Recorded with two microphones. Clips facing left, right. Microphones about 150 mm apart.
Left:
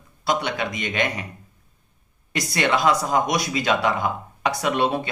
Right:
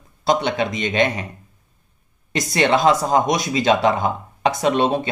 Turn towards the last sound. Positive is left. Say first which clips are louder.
# right 4 dB
turn(degrees=-25)  # may be behind; listen again after turning